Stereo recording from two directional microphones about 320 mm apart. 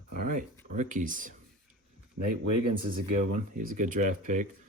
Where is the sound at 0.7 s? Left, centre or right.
Right.